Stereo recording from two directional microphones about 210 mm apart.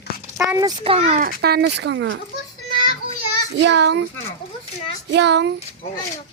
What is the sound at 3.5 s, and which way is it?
Speech, 55° right (ahead or behind).